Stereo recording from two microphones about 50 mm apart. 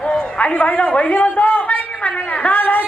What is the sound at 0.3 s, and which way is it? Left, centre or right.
A man's voice, left.